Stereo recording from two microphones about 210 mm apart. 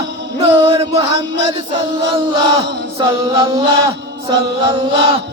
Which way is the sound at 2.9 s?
20° right (ahead or behind).